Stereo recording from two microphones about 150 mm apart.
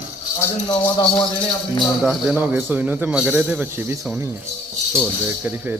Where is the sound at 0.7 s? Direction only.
30° left (ahead or behind).